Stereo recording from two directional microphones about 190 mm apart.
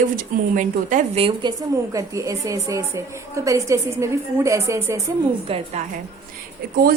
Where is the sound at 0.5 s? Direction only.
45° right (ahead or behind).